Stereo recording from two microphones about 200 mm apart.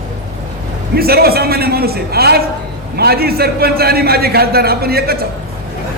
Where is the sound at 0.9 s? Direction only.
50° right (ahead or behind).